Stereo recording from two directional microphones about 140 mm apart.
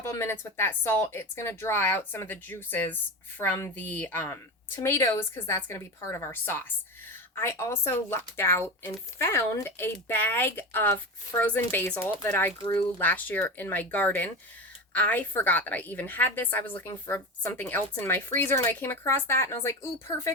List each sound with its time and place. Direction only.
0.0 s speech: 20° left (ahead or behind)